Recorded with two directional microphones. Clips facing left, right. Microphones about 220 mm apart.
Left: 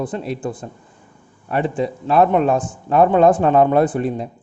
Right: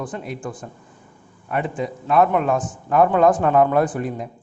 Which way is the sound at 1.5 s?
30° left (ahead or behind).